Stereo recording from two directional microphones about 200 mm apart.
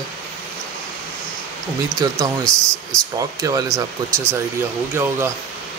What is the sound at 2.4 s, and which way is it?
Speech, 5° left (ahead or behind).